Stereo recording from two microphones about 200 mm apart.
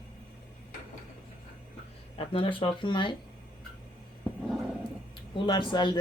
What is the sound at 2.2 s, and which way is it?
Speech, 25° left (ahead or behind).